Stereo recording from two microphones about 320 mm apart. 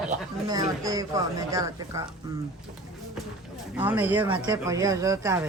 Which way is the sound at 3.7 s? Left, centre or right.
Centre.